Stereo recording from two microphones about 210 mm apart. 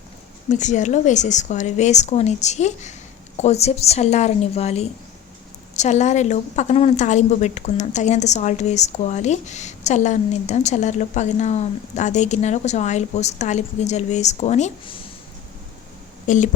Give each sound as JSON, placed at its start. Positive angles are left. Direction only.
{"t": 0.5, "sound": "a woman's voice", "side_deg": 35}
{"t": 16.2, "sound": "speech", "side_deg": 35}